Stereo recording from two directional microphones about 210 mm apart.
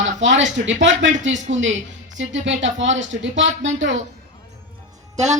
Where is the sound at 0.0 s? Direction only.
65° right (ahead or behind).